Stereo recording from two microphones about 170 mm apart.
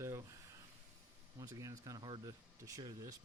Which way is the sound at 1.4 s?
20° right (ahead or behind).